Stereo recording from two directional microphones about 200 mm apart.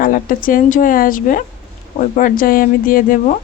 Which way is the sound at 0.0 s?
45° left (ahead or behind).